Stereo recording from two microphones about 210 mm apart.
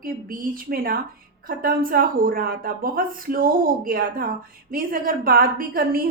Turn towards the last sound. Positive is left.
turn(degrees=-45)  # may be behind; listen again after turning